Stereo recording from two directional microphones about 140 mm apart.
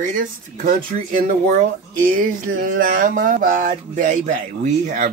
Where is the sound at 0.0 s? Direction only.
75° right (ahead or behind).